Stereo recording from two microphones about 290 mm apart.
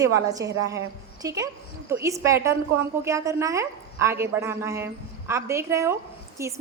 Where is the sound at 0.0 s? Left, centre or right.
Centre.